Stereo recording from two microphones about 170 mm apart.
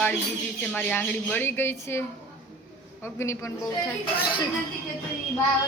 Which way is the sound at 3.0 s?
15° left (ahead or behind).